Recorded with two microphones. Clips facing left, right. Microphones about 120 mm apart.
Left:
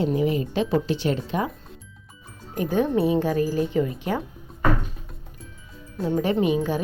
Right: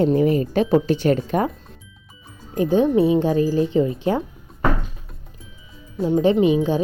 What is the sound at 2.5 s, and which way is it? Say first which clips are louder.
Speech: right 5 dB; 25° right (ahead or behind).